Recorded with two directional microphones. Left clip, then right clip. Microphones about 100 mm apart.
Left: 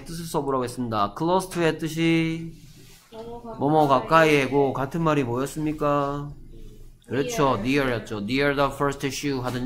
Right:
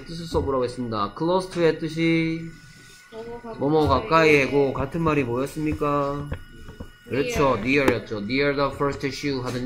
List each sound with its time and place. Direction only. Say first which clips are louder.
0.3 s speech: right 2 dB; 15° left (ahead or behind)
3.6 s speech: left 1 dB; 10° left (ahead or behind)
4.2 s speech: right 1 dB; 25° left (ahead or behind)